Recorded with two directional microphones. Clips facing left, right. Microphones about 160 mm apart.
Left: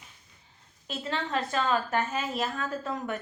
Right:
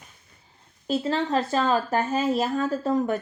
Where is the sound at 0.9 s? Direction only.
35° right (ahead or behind).